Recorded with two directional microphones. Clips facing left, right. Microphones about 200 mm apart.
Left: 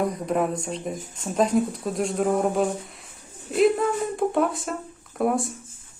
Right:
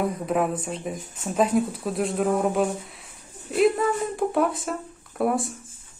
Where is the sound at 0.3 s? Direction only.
Centre (ahead or behind).